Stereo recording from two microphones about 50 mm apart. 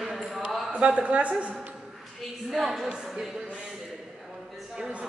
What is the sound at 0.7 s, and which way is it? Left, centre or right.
Speech, right.